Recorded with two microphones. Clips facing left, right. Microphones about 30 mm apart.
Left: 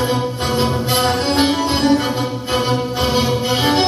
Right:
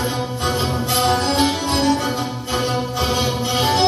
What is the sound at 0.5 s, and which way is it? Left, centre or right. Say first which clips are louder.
Music: left 4 dB; left.